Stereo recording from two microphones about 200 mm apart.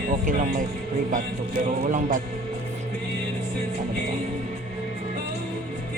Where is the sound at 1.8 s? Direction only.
40° right (ahead or behind).